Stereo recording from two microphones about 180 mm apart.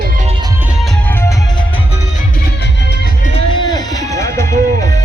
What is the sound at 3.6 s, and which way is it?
Music, 20° left (ahead or behind).